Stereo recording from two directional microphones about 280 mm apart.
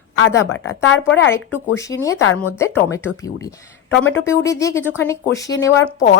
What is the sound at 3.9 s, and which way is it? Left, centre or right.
Speech, left.